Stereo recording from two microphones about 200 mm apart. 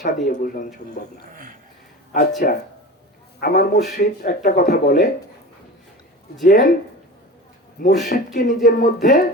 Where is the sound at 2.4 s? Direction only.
45° left (ahead or behind).